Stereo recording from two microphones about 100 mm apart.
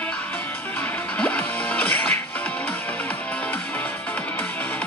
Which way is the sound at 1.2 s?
15° left (ahead or behind).